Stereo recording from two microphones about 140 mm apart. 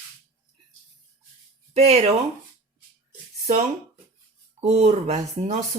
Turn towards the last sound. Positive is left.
turn(degrees=-50)  # may be behind; listen again after turning